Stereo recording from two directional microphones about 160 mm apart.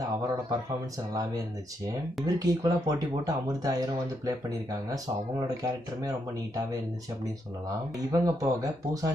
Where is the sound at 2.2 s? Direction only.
25° right (ahead or behind).